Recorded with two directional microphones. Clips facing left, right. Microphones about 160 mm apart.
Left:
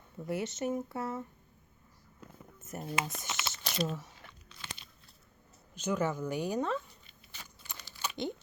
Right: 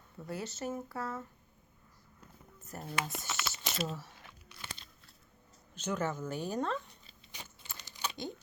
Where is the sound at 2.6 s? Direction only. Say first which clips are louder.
Left 2 dB; 20° left (ahead or behind).